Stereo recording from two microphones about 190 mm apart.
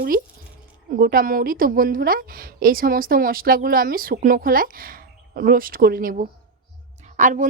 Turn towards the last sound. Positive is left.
turn(degrees=-40)  # may be behind; listen again after turning